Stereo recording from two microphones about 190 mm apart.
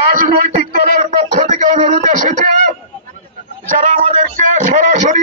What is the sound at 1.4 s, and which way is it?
A man's voice, 40° right (ahead or behind).